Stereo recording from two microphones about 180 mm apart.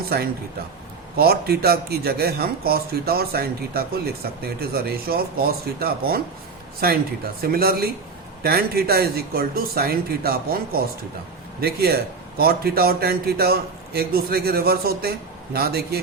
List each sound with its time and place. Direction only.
0.1 s speech: 60° right (ahead or behind)